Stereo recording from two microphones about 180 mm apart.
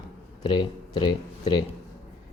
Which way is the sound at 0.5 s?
25° left (ahead or behind).